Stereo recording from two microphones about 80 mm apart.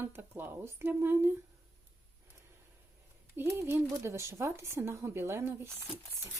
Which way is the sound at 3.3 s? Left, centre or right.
Right.